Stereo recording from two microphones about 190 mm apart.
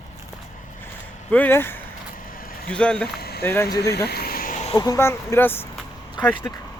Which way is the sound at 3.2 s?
55° left (ahead or behind).